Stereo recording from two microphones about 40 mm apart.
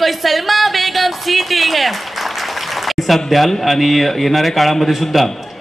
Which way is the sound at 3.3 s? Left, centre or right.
Centre.